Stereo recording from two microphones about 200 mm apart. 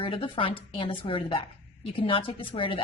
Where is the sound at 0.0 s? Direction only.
25° left (ahead or behind).